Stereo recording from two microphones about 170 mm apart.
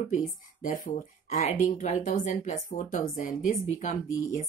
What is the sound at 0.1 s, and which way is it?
Speech, 50° left (ahead or behind).